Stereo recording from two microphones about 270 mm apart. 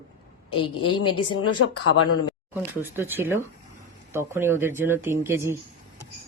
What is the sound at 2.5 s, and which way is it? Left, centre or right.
Speech, centre.